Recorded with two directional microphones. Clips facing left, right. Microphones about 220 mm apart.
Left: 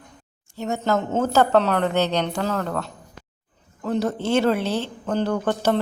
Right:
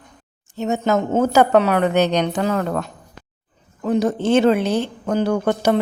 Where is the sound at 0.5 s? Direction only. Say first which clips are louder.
Right 4 dB; 20° right (ahead or behind).